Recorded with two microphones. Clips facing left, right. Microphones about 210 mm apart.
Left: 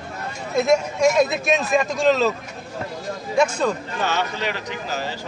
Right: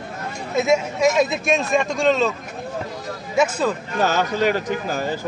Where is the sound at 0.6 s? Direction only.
Centre (ahead or behind).